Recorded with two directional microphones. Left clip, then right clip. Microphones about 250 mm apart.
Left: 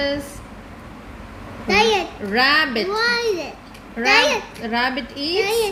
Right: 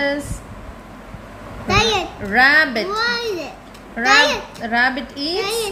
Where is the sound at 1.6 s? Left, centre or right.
Centre.